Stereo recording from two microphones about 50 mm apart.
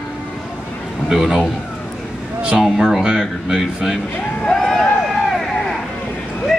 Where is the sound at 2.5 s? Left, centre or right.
Centre.